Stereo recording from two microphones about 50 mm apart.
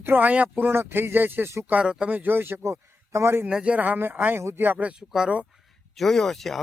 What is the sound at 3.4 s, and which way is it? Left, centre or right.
Speech, centre.